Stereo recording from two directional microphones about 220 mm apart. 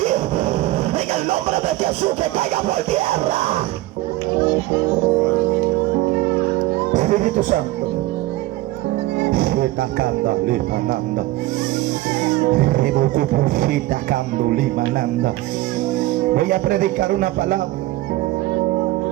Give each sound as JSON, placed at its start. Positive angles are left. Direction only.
{"t": 0.9, "sound": "music", "side_deg": -30}
{"t": 6.9, "sound": "music", "side_deg": -35}
{"t": 9.3, "sound": "music", "side_deg": -45}
{"t": 12.5, "sound": "music", "side_deg": -40}
{"t": 16.3, "sound": "music", "side_deg": -35}